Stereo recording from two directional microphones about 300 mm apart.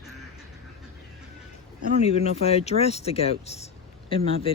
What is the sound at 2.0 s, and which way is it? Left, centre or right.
Speech, left.